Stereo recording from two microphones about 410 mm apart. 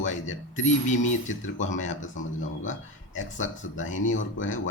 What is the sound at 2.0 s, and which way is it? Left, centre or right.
Speech, left.